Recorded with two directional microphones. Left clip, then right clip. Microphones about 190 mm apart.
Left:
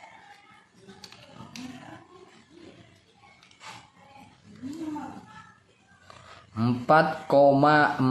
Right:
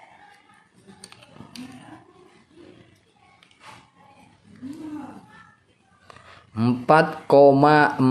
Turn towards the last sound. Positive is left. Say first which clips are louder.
# right 4 dB
turn(degrees=-35)  # may be behind; listen again after turning